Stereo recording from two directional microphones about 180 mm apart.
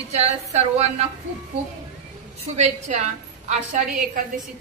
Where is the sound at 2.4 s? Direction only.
40° right (ahead or behind).